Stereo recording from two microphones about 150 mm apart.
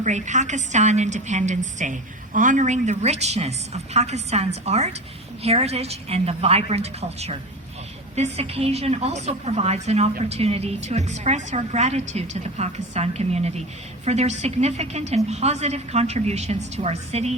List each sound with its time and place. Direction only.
0.0 s a woman's voice: 55° right (ahead or behind)